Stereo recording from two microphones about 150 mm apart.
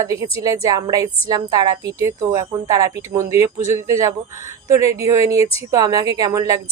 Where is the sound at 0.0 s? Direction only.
20° right (ahead or behind).